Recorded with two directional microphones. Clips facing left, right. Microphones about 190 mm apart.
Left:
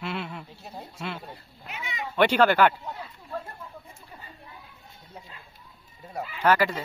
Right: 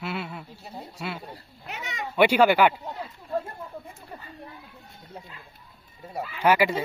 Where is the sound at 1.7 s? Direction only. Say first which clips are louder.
Right 1 dB; 45° right (ahead or behind).